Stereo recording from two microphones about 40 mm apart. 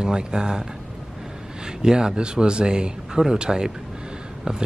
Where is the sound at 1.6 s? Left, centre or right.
Centre.